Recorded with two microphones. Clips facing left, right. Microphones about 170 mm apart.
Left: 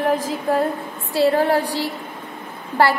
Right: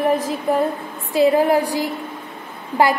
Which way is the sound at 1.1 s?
15° right (ahead or behind).